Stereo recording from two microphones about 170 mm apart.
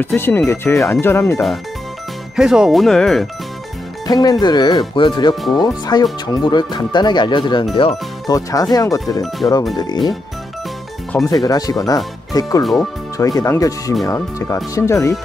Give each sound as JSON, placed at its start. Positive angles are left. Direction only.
{"t": 0.0, "sound": "speech", "side_deg": 10}
{"t": 2.3, "sound": "speech", "side_deg": -5}
{"t": 4.1, "sound": "speech", "side_deg": 25}
{"t": 5.3, "sound": "speech", "side_deg": 0}
{"t": 5.6, "sound": "speech", "side_deg": 25}
{"t": 8.4, "sound": "speech", "side_deg": 20}
{"t": 11.2, "sound": "speech", "side_deg": 20}